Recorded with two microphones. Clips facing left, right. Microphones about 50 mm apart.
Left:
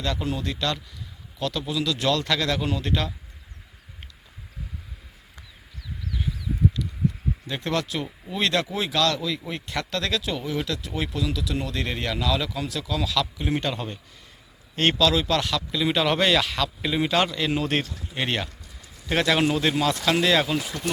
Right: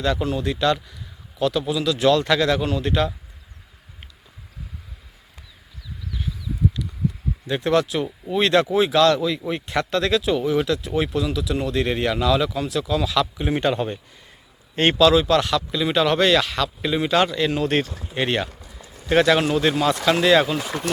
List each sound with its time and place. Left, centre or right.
0.0 s a man's voice: centre
7.4 s a man's voice: centre
18.4 s a sound: right
19.0 s a man's voice: centre